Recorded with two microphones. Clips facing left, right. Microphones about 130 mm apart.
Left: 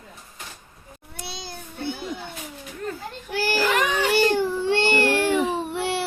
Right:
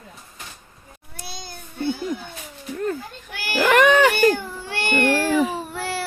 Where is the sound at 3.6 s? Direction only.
65° right (ahead or behind).